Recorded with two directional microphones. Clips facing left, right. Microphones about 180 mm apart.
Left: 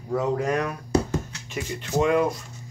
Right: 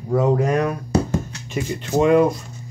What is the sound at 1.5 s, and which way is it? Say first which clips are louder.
Speech: right 5 dB; 25° right (ahead or behind).